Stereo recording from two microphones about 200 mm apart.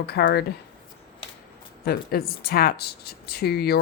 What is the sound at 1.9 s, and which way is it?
Speech, 50° left (ahead or behind).